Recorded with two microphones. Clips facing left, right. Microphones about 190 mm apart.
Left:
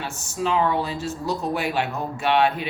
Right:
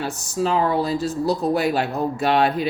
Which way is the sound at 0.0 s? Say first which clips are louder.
Right 4 dB; 35° right (ahead or behind).